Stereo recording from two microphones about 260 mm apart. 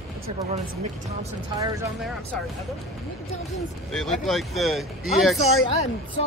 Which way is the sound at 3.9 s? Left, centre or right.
Centre.